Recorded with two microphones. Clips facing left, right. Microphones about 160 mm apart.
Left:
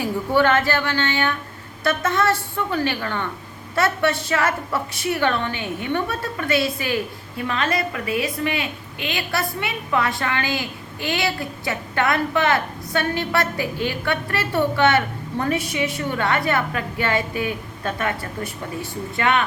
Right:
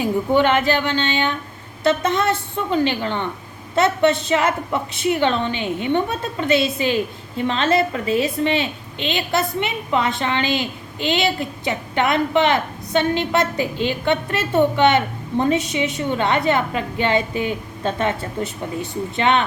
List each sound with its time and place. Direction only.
0.0 s a woman's voice: 20° right (ahead or behind)